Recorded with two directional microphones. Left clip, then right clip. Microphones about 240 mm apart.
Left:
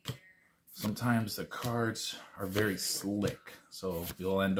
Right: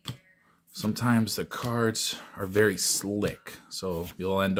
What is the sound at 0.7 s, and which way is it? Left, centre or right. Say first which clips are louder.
Speech: right 5 dB; right.